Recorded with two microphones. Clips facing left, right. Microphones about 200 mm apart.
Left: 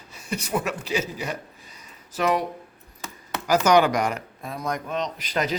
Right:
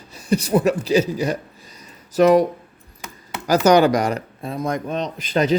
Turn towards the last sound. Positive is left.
turn(degrees=-25)  # may be behind; listen again after turning